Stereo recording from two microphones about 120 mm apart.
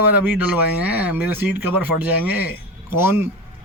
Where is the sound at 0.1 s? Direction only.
10° right (ahead or behind).